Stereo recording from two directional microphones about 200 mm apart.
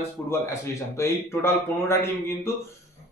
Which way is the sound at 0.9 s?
10° left (ahead or behind).